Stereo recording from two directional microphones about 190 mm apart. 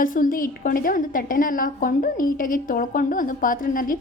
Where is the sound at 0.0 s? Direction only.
45° left (ahead or behind).